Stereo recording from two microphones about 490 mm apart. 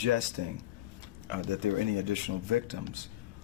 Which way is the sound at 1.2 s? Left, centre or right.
Right.